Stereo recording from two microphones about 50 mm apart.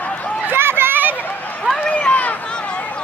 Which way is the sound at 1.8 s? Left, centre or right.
Left.